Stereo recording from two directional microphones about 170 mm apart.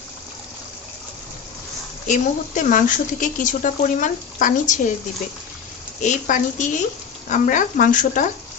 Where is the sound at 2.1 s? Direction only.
50° left (ahead or behind).